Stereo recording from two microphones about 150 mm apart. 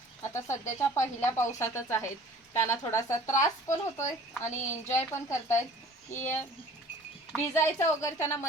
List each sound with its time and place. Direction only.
0.2 s speech: 20° left (ahead or behind)
7.3 s speech: 15° left (ahead or behind)